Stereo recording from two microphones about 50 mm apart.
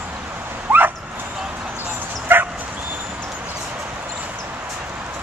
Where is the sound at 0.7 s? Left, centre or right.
Right.